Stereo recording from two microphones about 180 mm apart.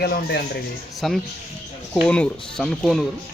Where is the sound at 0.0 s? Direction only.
65° left (ahead or behind).